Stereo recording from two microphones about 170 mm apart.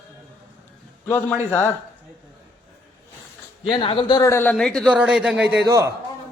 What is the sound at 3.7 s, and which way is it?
Speech, 35° left (ahead or behind).